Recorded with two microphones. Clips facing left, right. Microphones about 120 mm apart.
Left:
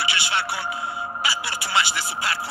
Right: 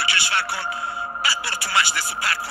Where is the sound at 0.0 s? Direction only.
15° left (ahead or behind).